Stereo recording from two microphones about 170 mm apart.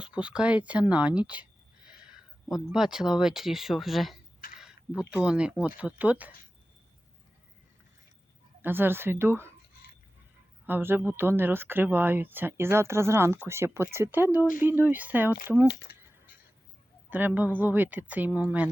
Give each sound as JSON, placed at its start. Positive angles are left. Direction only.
{"t": 0.0, "sound": "speech", "side_deg": -5}
{"t": 8.6, "sound": "speech", "side_deg": -10}
{"t": 10.7, "sound": "speech", "side_deg": -10}
{"t": 15.6, "sound": "speech", "side_deg": 75}
{"t": 16.0, "sound": "a sound", "side_deg": -10}
{"t": 17.1, "sound": "speech", "side_deg": -10}